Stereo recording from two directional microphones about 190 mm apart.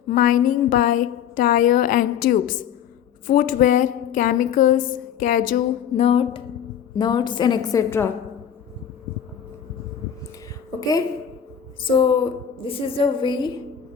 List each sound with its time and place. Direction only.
0.1 s a woman's voice: 45° left (ahead or behind)
6.0 s music: 30° left (ahead or behind)
6.9 s a woman's voice: 25° left (ahead or behind)
10.8 s a woman's voice: 20° left (ahead or behind)